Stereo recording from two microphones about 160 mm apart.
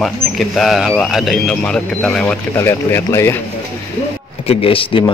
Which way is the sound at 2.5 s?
15° left (ahead or behind).